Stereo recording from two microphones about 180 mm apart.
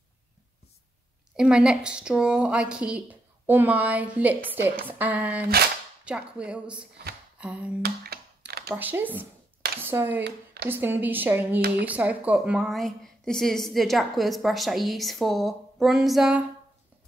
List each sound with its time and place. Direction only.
1.3 s a woman's voice: 5° right (ahead or behind)
7.3 s a sound: 5° right (ahead or behind)
7.8 s speech: 60° right (ahead or behind)
8.6 s a woman's voice: 10° right (ahead or behind)
10.2 s speech: 60° right (ahead or behind)
10.7 s a woman's voice: 10° right (ahead or behind)